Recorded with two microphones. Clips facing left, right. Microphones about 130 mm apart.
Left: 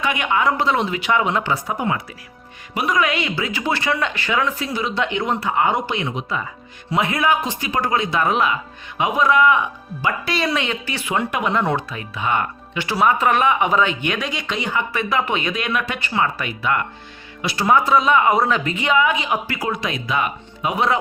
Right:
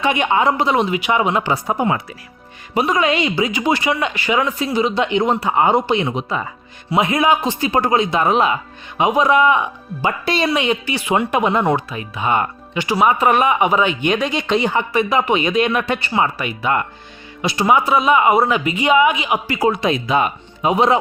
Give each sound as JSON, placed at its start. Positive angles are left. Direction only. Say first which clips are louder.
{"t": 0.0, "sound": "speech", "louder": "right 4 dB", "side_deg": -25}
{"t": 1.6, "sound": "speech", "louder": "right 4 dB", "side_deg": -30}
{"t": 11.6, "sound": "speech", "louder": "right 4 dB", "side_deg": -10}
{"t": 14.9, "sound": "speech", "louder": "right 5 dB", "side_deg": -15}
{"t": 17.4, "sound": "speech", "louder": "right 4 dB", "side_deg": -25}
{"t": 17.7, "sound": "speech", "louder": "right 1 dB", "side_deg": -10}
{"t": 19.5, "sound": "speech", "louder": "right 7 dB", "side_deg": -25}